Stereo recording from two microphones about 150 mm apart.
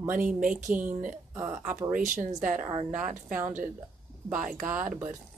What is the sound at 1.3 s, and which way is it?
Speech, 20° right (ahead or behind).